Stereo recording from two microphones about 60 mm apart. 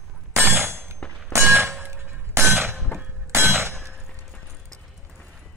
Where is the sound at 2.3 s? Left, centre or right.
Right.